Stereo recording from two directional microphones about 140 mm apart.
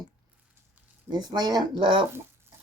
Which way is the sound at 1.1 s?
30° right (ahead or behind).